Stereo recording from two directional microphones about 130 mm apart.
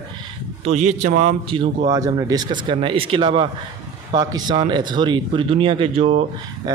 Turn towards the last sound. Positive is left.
turn(degrees=-25)  # may be behind; listen again after turning